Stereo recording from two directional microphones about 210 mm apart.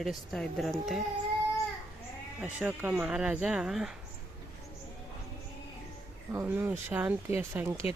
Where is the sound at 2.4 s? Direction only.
5° right (ahead or behind).